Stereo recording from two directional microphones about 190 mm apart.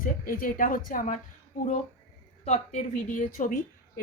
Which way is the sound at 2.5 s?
40° left (ahead or behind).